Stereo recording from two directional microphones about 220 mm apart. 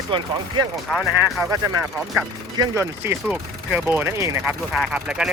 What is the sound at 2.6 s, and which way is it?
Speech, 10° right (ahead or behind).